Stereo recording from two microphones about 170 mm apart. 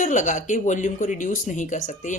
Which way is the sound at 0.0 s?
50° left (ahead or behind).